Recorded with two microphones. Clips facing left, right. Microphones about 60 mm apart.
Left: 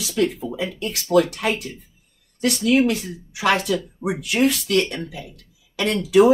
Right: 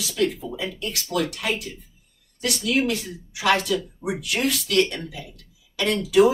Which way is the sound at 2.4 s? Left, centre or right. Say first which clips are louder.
Left 5 dB; left.